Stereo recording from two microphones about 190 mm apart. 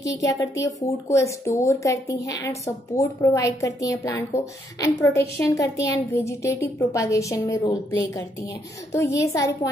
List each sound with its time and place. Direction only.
0.0 s a woman's voice: 15° left (ahead or behind)